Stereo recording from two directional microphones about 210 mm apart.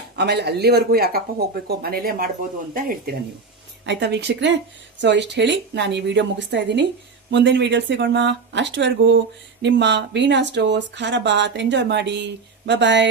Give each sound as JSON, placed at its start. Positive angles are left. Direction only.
{"t": 0.2, "sound": "speech", "side_deg": -50}
{"t": 3.8, "sound": "speech", "side_deg": -55}